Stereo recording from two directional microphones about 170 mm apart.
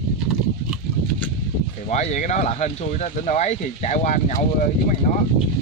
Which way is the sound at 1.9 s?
40° left (ahead or behind).